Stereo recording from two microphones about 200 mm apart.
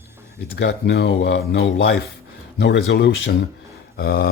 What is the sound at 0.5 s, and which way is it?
Speech, 55° left (ahead or behind).